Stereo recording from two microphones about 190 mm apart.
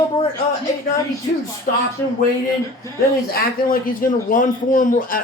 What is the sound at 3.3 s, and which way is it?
Speech, 50° left (ahead or behind).